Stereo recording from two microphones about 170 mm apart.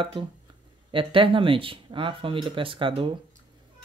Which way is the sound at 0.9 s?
30° right (ahead or behind).